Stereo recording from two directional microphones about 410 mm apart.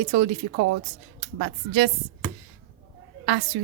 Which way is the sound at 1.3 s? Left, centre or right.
Right.